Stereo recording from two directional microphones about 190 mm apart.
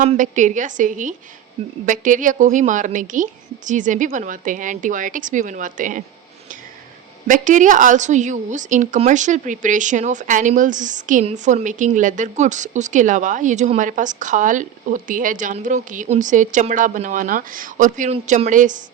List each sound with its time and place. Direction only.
0.1 s a woman's voice: 40° right (ahead or behind)
7.3 s a woman's voice: 40° right (ahead or behind)